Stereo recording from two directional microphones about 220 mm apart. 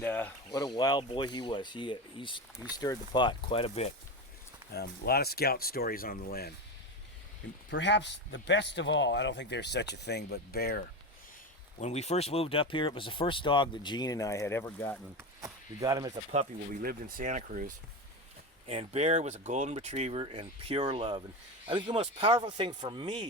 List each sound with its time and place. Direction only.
0.0 s speech: 10° left (ahead or behind); by 3.9 s 25° left (ahead or behind)
4.7 s speech: 45° left (ahead or behind)
7.7 s speech: 55° left (ahead or behind)
11.8 s speech: 30° left (ahead or behind); by 14.9 s 10° left (ahead or behind)
15.2 s speech: 15° right (ahead or behind)
16.3 s speech: 35° right (ahead or behind)
18.7 s speech: 30° right (ahead or behind)